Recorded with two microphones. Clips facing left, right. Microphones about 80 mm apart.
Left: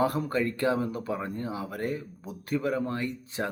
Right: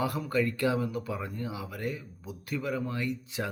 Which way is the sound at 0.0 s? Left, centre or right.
Left.